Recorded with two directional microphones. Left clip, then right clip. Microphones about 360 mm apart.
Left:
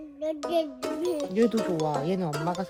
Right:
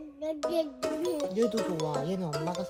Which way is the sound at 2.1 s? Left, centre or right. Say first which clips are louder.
Left 5 dB; centre.